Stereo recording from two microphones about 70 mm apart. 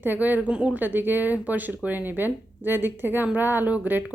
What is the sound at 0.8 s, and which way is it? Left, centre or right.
Speech, right.